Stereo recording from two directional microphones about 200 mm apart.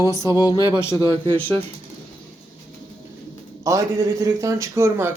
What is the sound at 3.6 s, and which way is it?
A man's voice, 15° right (ahead or behind).